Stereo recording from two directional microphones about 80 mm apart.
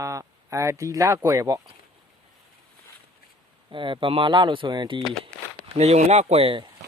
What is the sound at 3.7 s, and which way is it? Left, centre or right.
Speech, right.